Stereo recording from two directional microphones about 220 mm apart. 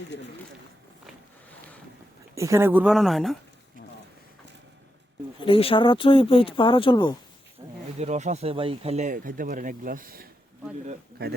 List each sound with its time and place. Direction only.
2.3 s speech: 15° right (ahead or behind)
5.4 s speech: 25° left (ahead or behind)
7.6 s wild animals: 15° right (ahead or behind)
7.9 s a man's voice: 30° right (ahead or behind)